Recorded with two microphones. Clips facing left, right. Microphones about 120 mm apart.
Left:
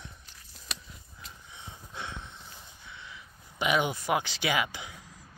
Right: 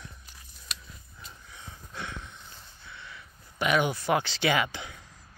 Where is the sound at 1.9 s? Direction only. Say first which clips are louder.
Right 1 dB; 25° left (ahead or behind).